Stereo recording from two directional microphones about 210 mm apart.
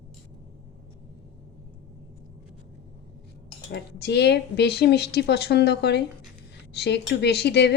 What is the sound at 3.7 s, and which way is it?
Speech, 55° left (ahead or behind).